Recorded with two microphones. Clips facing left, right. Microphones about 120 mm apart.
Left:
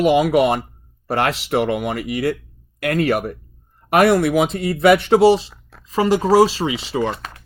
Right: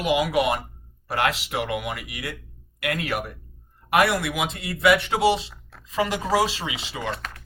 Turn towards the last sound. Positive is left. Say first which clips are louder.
# left 9 dB
turn(degrees=35)  # may be behind; listen again after turning